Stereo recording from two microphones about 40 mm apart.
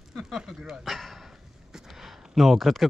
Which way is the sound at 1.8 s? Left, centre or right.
Centre.